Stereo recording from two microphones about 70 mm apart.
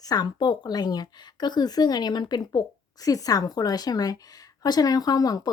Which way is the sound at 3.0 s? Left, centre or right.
Left.